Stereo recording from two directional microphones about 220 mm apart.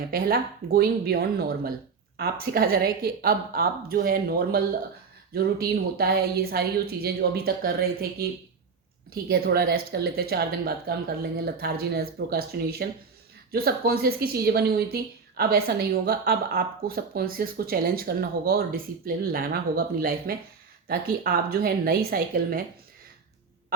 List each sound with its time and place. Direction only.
0.1 s speech: 40° right (ahead or behind)
9.3 s speech: 45° right (ahead or behind)